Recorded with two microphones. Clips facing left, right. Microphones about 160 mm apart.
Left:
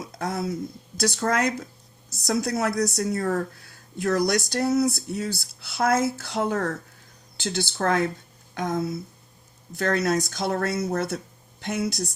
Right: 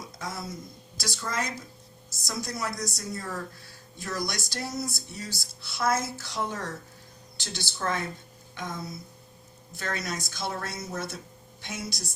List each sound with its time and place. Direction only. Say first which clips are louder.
0.0 s speech: left 8 dB; 60° left (ahead or behind)